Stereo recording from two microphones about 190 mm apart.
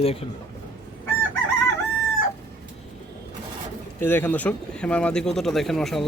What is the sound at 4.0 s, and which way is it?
Speech, 10° left (ahead or behind).